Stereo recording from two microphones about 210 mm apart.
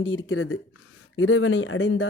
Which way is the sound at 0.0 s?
65° left (ahead or behind).